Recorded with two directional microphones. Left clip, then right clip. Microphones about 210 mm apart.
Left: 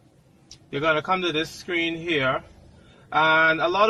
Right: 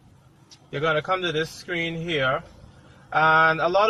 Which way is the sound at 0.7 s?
45° left (ahead or behind).